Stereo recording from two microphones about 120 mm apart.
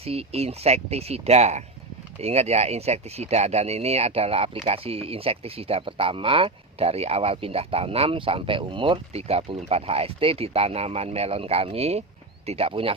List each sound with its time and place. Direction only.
0.0 s speech: 55° right (ahead or behind)